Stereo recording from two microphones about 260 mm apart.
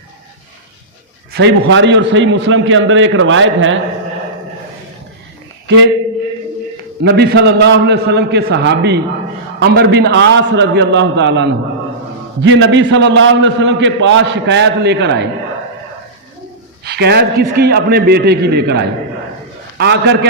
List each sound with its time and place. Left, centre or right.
1.3 s a man's voice: right
5.7 s a man's voice: right
7.0 s a man's voice: right
16.8 s a man's voice: right